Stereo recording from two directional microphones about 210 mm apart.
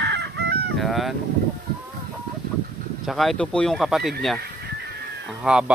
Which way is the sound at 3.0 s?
Centre (ahead or behind).